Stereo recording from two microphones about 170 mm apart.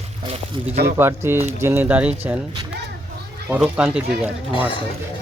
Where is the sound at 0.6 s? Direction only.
30° right (ahead or behind).